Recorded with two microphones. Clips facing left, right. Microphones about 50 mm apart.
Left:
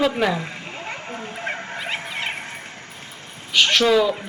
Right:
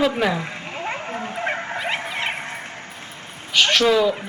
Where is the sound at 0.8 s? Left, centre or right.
Centre.